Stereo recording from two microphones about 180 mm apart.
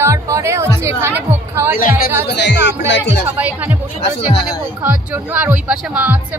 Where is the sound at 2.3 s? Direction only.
80° left.